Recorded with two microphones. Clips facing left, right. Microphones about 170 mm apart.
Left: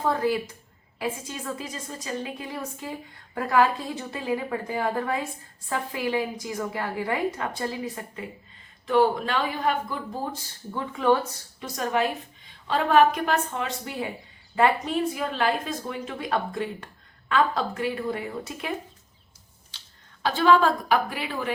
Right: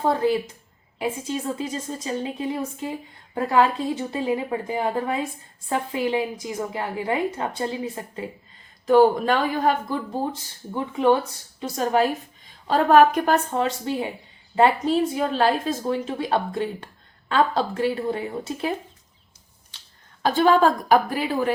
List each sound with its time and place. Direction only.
0.0 s a woman's voice: 25° right (ahead or behind)
8.9 s a woman's voice: 45° right (ahead or behind)
10.8 s a woman's voice: 20° right (ahead or behind)
11.6 s a woman's voice: 35° right (ahead or behind)
20.2 s a woman's voice: 45° right (ahead or behind)